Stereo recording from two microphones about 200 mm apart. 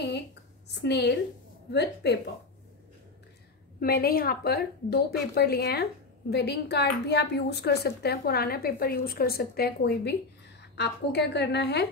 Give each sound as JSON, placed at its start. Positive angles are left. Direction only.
{"t": 0.7, "sound": "a woman's voice", "side_deg": 60}
{"t": 3.8, "sound": "a woman's voice", "side_deg": 50}